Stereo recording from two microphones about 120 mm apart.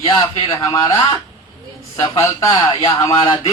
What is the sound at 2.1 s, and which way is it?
A man's voice, 30° left (ahead or behind).